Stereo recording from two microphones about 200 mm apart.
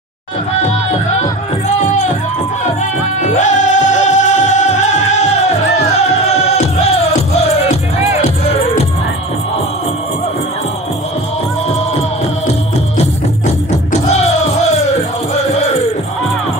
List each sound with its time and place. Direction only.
3.2 s music: 40° left (ahead or behind)